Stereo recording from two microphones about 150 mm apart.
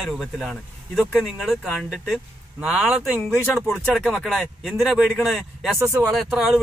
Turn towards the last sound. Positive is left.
turn(degrees=0)  # may be behind; listen again after turning